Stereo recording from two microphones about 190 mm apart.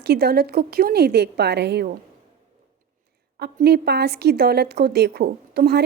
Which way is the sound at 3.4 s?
55° right (ahead or behind).